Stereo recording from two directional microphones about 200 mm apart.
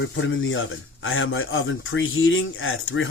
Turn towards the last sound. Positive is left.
turn(degrees=80)